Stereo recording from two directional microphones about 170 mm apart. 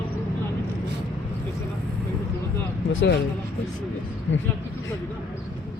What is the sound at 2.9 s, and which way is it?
Speech, 90° left.